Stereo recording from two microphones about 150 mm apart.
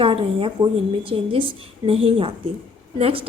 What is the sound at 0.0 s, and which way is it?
A woman's voice, 35° right (ahead or behind).